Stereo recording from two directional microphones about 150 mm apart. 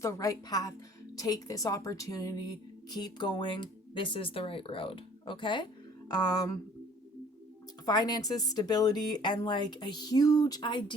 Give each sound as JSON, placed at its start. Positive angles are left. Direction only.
{"t": 0.0, "sound": "a woman's voice", "side_deg": 20}
{"t": 7.9, "sound": "speech", "side_deg": 25}